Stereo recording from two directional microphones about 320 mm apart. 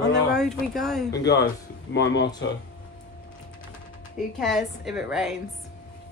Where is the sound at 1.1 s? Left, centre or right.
Left.